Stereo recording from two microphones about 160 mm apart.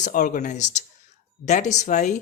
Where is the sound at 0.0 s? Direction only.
50° left (ahead or behind).